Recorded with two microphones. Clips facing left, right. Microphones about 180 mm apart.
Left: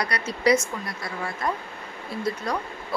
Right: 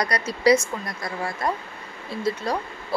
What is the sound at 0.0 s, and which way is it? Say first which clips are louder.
Speech: right 3 dB; 35° right (ahead or behind).